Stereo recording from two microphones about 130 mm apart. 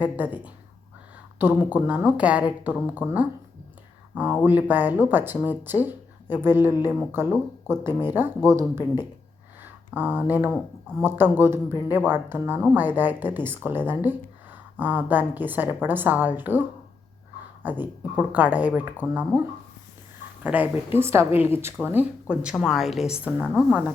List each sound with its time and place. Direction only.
0.0 s speech: 10° right (ahead or behind)
20.4 s speech: 10° right (ahead or behind)